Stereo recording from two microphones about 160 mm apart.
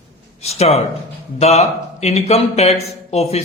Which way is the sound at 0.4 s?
40° left (ahead or behind).